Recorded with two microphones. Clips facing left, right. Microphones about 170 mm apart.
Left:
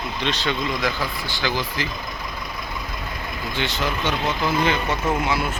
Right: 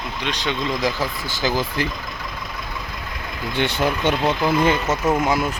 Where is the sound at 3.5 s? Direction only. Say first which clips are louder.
Right 5 dB; 55° right (ahead or behind).